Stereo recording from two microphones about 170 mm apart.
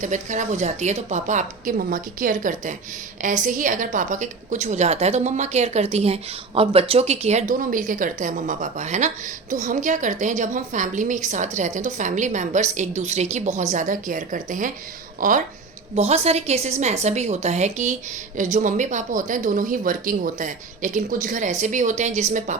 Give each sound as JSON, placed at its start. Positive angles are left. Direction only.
{"t": 0.0, "sound": "a woman's voice", "side_deg": -45}
{"t": 16.0, "sound": "a woman's voice", "side_deg": -40}